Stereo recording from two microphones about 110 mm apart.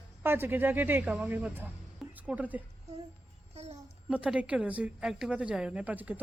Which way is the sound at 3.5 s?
70° right (ahead or behind).